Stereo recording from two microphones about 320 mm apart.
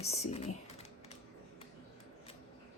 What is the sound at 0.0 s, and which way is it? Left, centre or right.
Speech, centre.